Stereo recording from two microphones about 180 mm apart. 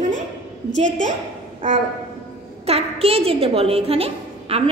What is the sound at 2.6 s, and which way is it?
A woman's voice, 35° right (ahead or behind).